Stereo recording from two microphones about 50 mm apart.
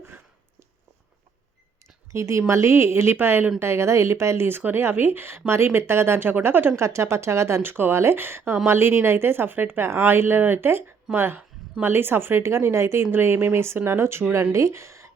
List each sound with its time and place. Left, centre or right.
2.1 s speech: right
3.6 s a woman's voice: right
6.7 s speech: right
7.6 s a woman's voice: right
14.5 s speech: right